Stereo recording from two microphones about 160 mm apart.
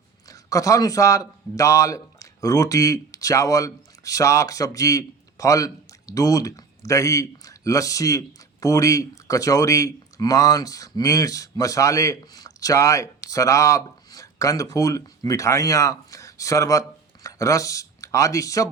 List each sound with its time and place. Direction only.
0.3 s a man's voice: 20° left (ahead or behind)